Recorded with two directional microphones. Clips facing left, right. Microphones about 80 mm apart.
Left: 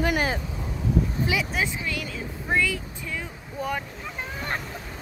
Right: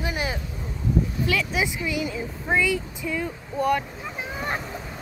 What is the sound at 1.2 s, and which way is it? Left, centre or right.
Speech, centre.